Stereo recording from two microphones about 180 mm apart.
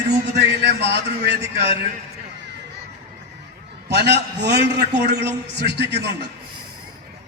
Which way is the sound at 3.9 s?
70° right (ahead or behind).